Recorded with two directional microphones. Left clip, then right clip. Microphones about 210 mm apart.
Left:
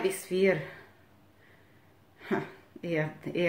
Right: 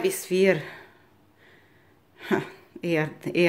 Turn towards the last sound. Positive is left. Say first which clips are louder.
# right 6 dB
turn(degrees=-45)  # may be behind; listen again after turning